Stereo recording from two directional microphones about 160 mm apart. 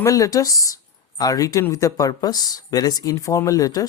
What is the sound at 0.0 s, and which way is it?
Speech, 20° left (ahead or behind).